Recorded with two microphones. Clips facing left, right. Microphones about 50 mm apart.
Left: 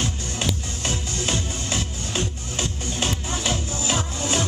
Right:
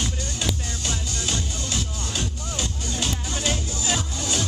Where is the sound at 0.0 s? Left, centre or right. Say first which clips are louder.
Left 1 dB; left.